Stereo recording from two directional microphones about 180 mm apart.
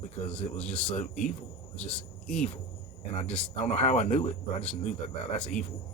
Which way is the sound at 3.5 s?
40° left (ahead or behind).